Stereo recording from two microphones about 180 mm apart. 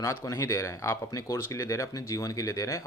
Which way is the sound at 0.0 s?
15° left (ahead or behind).